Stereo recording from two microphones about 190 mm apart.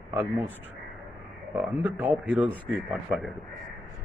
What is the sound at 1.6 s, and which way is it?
A man's voice, 10° right (ahead or behind).